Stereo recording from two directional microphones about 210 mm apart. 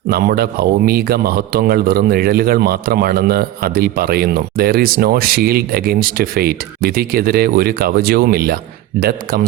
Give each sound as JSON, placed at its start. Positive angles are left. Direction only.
{"t": 0.1, "sound": "a man's voice", "side_deg": -45}